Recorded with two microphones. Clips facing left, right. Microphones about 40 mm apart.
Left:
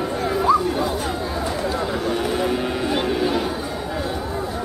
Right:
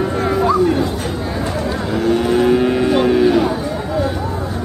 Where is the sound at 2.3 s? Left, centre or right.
Right.